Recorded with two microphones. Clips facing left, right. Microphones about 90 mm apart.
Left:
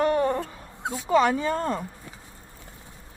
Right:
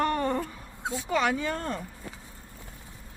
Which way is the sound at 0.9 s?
35° left (ahead or behind).